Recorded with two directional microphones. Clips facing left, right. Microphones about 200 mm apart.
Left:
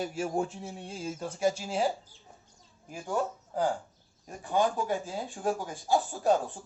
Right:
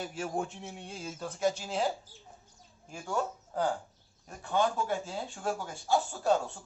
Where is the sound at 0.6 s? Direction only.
30° left (ahead or behind).